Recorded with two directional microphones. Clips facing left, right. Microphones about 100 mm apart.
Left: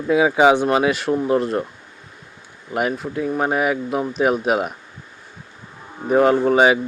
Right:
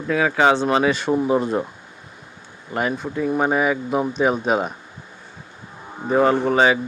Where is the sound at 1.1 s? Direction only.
5° right (ahead or behind).